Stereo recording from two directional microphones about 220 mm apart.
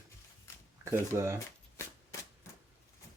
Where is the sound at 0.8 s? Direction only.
15° right (ahead or behind).